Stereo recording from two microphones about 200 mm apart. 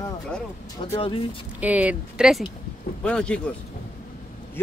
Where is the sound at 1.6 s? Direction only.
5° right (ahead or behind).